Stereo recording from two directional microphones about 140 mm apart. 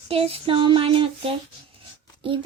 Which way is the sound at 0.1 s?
45° right (ahead or behind).